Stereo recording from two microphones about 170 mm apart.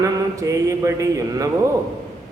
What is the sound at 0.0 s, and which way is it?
Mantra, 20° right (ahead or behind).